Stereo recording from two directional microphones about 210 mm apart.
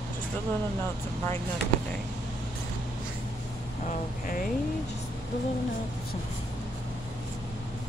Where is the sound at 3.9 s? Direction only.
40° left (ahead or behind).